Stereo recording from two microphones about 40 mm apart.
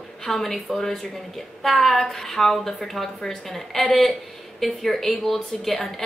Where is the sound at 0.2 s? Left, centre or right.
Centre.